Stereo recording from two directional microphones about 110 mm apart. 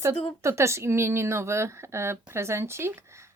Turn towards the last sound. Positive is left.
turn(degrees=-25)  # may be behind; listen again after turning